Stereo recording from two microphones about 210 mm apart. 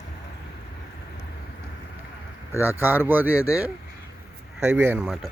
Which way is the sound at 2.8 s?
10° right (ahead or behind).